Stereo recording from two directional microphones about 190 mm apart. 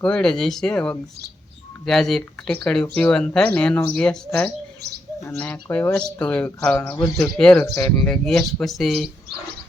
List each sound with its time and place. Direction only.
0.0 s speech: 5° left (ahead or behind)
6.8 s speech: 20° left (ahead or behind)
7.2 s speech: 5° left (ahead or behind)